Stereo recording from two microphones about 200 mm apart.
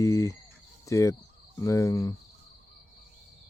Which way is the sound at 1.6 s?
15° left (ahead or behind).